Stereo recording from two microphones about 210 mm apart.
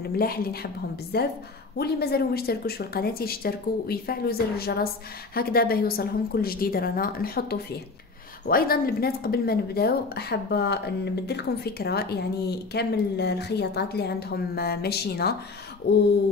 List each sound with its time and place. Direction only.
0.2 s speech: 45° left (ahead or behind)